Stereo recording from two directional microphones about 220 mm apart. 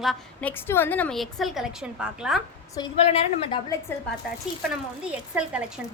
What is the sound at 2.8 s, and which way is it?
Speech, 30° left (ahead or behind).